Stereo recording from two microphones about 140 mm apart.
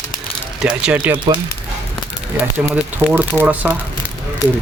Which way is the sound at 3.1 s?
10° right (ahead or behind).